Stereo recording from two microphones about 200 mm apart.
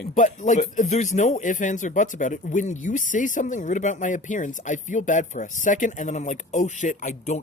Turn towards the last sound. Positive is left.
turn(degrees=35)  # may be behind; listen again after turning